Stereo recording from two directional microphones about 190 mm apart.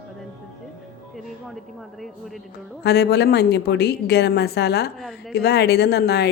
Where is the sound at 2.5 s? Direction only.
60° left (ahead or behind).